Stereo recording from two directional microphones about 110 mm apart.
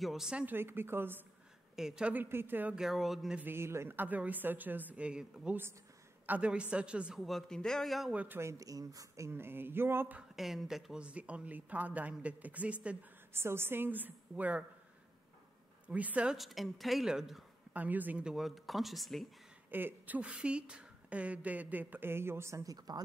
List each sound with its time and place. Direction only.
0.0 s speech: 5° right (ahead or behind); by 1.2 s 20° right (ahead or behind)
1.8 s speech: 5° right (ahead or behind)
2.2 s speech: 20° right (ahead or behind)
2.8 s a woman's voice: centre (ahead or behind)
3.3 s a woman's voice: 20° right (ahead or behind); by 8.1 s centre (ahead or behind)
8.1 s speech: 15° right (ahead or behind)
8.4 s speech: 30° right (ahead or behind)
10.3 s speech: centre (ahead or behind)
15.9 s a woman's voice: 15° right (ahead or behind)
19.7 s speech: 15° right (ahead or behind); by 23.0 s 35° right (ahead or behind)